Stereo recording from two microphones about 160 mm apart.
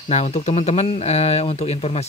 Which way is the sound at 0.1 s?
45° left (ahead or behind).